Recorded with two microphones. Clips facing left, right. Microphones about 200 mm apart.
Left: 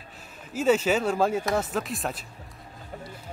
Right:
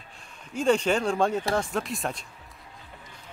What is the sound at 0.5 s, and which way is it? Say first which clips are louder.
A man's voice: left 1 dB; 5° left (ahead or behind).